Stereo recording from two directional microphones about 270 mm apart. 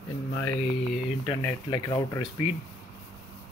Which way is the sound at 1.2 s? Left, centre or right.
Centre.